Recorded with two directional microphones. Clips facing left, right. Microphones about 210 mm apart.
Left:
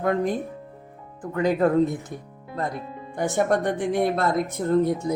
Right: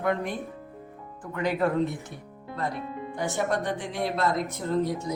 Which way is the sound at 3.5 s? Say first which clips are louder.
Left 7 dB; 50° left (ahead or behind).